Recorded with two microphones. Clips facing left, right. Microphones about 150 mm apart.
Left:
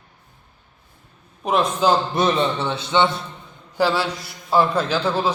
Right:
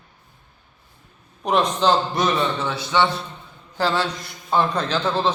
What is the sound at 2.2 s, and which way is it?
Speech, 25° left (ahead or behind).